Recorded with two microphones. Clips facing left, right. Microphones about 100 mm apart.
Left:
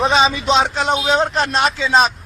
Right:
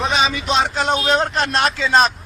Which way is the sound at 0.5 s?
Centre (ahead or behind).